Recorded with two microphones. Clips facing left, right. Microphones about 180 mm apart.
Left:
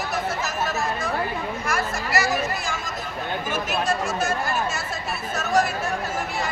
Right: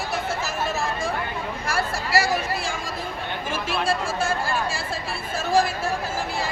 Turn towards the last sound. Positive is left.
turn(degrees=-30)  # may be behind; listen again after turning